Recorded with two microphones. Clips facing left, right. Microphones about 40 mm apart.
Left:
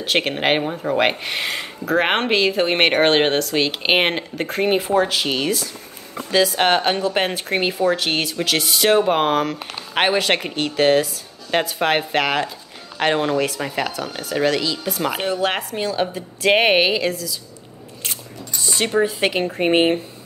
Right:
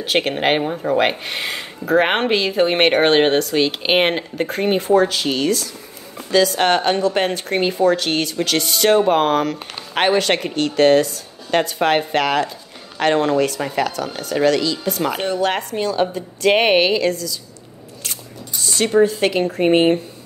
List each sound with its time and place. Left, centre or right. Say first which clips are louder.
0.0 s speech: right 1 dB; centre
18.9 s speech: right 5 dB; centre